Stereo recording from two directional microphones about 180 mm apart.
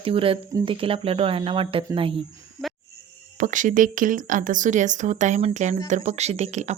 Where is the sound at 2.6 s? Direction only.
15° right (ahead or behind).